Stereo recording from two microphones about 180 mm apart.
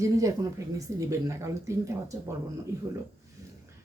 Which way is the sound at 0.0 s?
20° right (ahead or behind).